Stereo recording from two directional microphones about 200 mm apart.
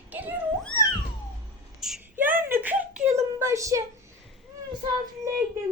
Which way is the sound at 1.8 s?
Centre (ahead or behind).